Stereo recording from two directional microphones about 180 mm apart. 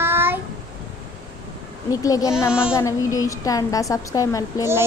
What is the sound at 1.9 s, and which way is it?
A woman's voice, 20° left (ahead or behind).